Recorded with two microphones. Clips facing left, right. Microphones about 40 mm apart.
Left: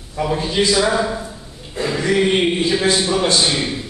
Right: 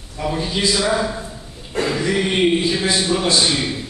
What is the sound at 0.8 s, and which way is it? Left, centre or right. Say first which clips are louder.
Speech: left 1 dB; centre.